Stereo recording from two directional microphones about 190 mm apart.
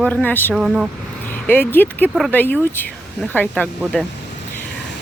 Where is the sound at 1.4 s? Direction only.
10° left (ahead or behind).